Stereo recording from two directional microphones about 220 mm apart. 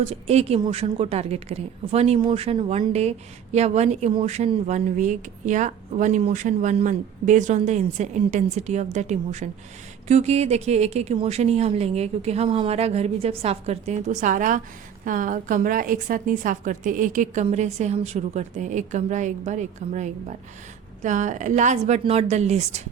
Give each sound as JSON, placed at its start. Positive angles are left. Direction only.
{"t": 0.0, "sound": "a woman's voice", "side_deg": -30}